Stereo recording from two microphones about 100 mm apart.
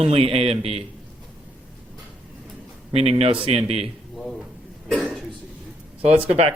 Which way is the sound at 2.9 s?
80° right.